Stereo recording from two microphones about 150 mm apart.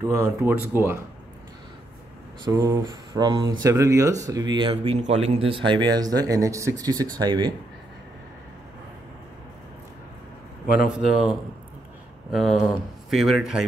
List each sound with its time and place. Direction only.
0.0 s speech: 20° right (ahead or behind)
2.4 s speech: 20° right (ahead or behind)
4.9 s speech: 45° right (ahead or behind); by 7.5 s 30° right (ahead or behind)
10.9 s speech: 5° right (ahead or behind)